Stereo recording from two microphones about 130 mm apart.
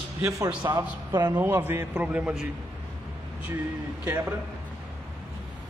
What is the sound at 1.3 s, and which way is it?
A man's voice, 15° right (ahead or behind).